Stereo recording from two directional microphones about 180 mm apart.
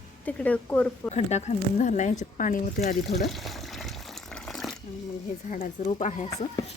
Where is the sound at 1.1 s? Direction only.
40° left (ahead or behind).